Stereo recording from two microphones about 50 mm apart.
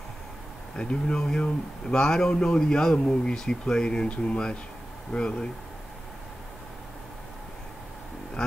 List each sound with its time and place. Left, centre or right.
0.7 s speech: centre
8.4 s vehicle: centre